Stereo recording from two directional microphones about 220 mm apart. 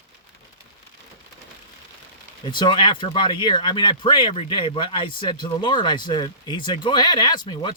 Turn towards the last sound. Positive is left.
turn(degrees=20)  # may be behind; listen again after turning